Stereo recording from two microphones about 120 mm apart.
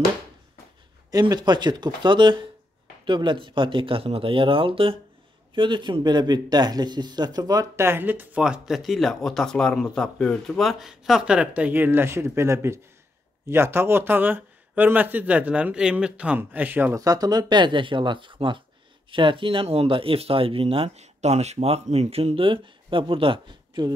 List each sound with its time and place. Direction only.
1.3 s speech: 40° right (ahead or behind); by 16.9 s 15° right (ahead or behind)
16.9 s speech: 30° right (ahead or behind)